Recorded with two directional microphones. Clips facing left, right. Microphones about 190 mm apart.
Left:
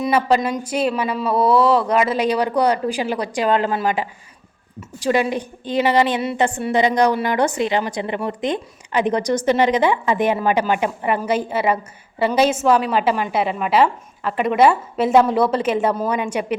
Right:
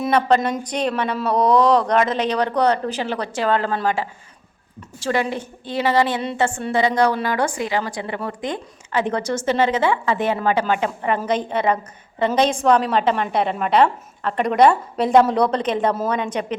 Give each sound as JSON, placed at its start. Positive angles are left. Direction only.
{"t": 0.0, "sound": "a woman's voice", "side_deg": 5}